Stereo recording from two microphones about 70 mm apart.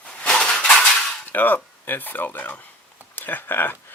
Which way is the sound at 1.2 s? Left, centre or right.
Left.